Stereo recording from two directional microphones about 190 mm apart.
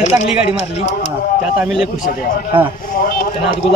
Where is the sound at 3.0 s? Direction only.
50° left (ahead or behind).